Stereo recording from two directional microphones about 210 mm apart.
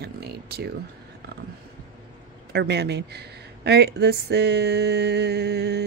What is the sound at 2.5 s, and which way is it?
Speech, 50° right (ahead or behind).